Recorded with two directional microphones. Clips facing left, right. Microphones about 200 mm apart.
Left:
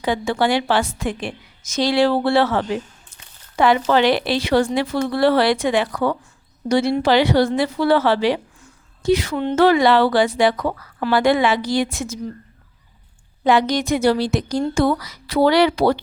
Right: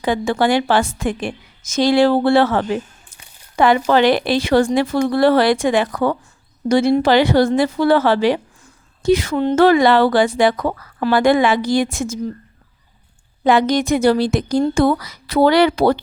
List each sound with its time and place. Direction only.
0.0 s a woman's voice: 50° right (ahead or behind)
13.4 s a woman's voice: 50° right (ahead or behind)